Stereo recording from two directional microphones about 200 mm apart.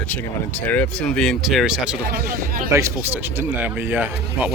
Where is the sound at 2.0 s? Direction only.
45° right (ahead or behind).